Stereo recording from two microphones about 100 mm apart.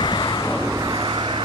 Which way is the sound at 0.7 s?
40° right (ahead or behind).